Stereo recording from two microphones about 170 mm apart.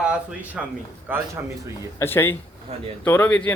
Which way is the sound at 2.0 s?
15° left (ahead or behind).